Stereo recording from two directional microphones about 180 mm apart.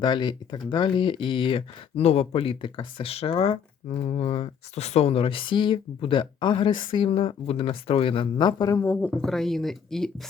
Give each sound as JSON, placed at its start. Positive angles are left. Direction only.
{"t": 0.0, "sound": "speech", "side_deg": 25}